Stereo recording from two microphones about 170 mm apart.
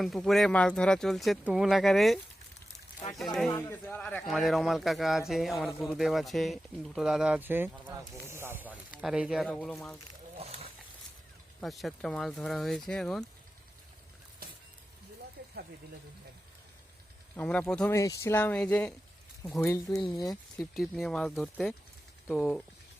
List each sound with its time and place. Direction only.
0.0 s speech: centre (ahead or behind)
3.2 s speech: centre (ahead or behind)
3.7 s speech: 10° left (ahead or behind)
10.3 s a sound: 35° right (ahead or behind)
11.6 s speech: centre (ahead or behind)
14.4 s music: 60° right (ahead or behind)
15.4 s a sound: 60° right (ahead or behind)
17.3 s speech: 10° left (ahead or behind)
17.9 s speech: 20° left (ahead or behind)
20.1 s speech: 20° left (ahead or behind)
20.3 s speech: centre (ahead or behind)